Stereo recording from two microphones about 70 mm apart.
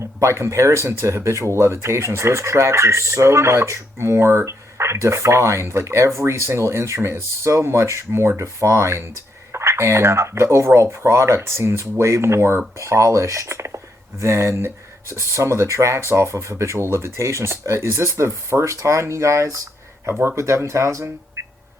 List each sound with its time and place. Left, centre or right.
0.0 s speech: right